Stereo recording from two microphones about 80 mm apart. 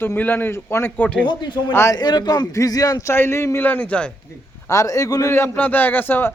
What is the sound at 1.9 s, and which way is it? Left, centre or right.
A man's voice, left.